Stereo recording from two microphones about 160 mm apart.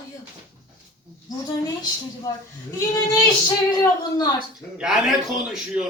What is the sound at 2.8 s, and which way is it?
Speech, 20° left (ahead or behind).